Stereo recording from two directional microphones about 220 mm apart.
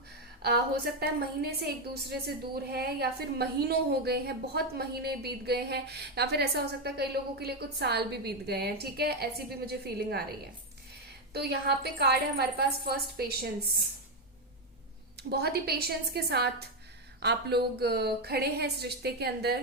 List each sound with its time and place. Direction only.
0.4 s a woman's voice: 45° right (ahead or behind)
11.3 s a woman's voice: 45° right (ahead or behind)
15.3 s a woman's voice: 45° right (ahead or behind)